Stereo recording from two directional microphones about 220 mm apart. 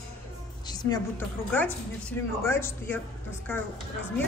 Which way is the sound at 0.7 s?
15° left (ahead or behind).